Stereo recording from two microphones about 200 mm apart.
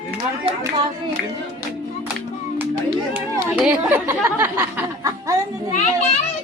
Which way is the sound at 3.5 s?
5° right (ahead or behind).